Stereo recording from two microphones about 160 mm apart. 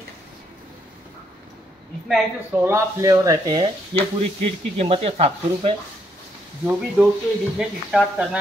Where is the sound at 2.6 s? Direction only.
20° right (ahead or behind); by 5.8 s 40° right (ahead or behind).